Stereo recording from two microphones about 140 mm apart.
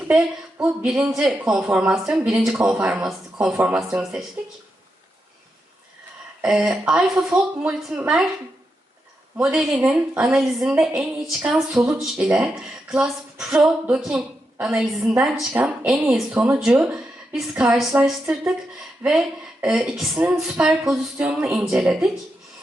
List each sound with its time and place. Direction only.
0.6 s a woman's voice: 10° right (ahead or behind)
6.4 s a woman's voice: 5° right (ahead or behind)
9.4 s a woman's voice: 5° right (ahead or behind)
19.0 s speech: 20° right (ahead or behind)
19.6 s speech: 5° right (ahead or behind)